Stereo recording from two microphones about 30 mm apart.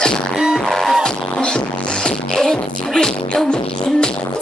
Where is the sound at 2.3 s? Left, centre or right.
Centre.